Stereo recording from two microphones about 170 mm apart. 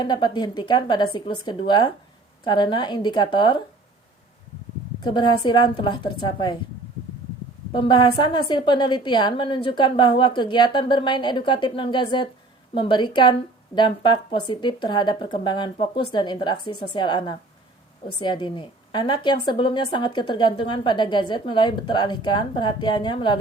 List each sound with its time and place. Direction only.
0.0 s a woman's voice: 25° left (ahead or behind)
5.1 s a woman's voice: 25° left (ahead or behind)
7.7 s a woman's voice: 25° left (ahead or behind)